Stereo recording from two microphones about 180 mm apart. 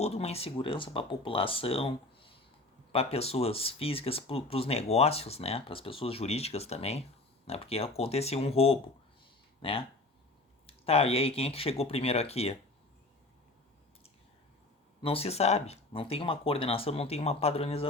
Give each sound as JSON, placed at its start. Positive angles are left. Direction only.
{"t": 0.0, "sound": "speech", "side_deg": 35}
{"t": 15.0, "sound": "speech", "side_deg": 35}